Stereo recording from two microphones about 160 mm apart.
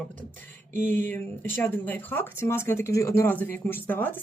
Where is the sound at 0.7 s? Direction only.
50° right (ahead or behind).